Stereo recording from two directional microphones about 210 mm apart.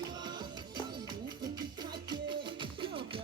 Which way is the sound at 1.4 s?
20° right (ahead or behind).